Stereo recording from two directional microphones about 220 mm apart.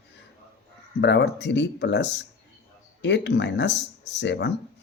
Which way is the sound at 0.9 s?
50° left (ahead or behind).